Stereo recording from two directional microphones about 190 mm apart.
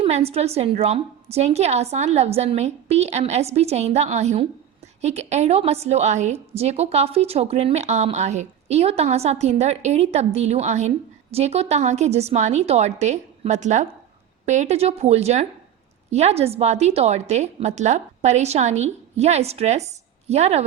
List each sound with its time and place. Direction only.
0.0 s a woman's voice: 30° right (ahead or behind)